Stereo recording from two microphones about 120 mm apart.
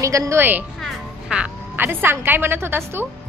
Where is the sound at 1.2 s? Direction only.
10° right (ahead or behind).